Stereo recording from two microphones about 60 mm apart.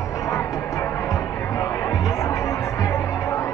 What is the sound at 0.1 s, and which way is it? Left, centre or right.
Music, left.